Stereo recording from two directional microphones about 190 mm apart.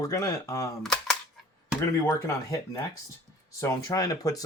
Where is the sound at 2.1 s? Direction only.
15° left (ahead or behind).